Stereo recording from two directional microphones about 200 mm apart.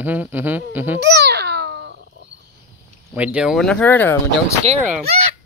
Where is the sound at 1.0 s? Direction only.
55° right (ahead or behind).